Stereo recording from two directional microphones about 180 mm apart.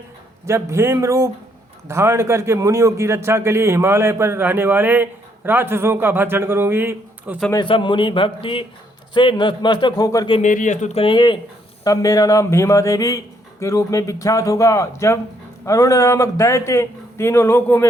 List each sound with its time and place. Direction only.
0.4 s a man's voice: 15° right (ahead or behind)
7.5 s a man's voice: 25° left (ahead or behind)
10.4 s speech: 45° left (ahead or behind); by 17.8 s 15° left (ahead or behind)